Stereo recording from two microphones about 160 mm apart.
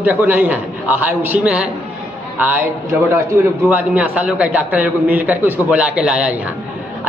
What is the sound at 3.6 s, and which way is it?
A man's voice, 10° right (ahead or behind).